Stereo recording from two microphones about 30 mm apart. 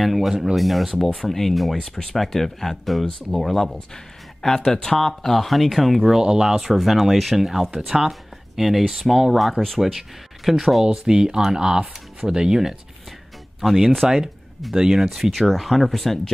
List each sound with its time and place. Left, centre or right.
0.0 s speech: centre
1.2 s speech: centre
1.5 s speech: centre
1.8 s speech: centre
6.2 s speech: centre
6.5 s speech: centre
11.1 s speech: right
13.6 s speech: centre
14.0 s speech: centre